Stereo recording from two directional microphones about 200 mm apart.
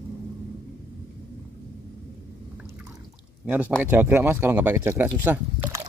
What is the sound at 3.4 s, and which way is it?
Speech, 10° right (ahead or behind).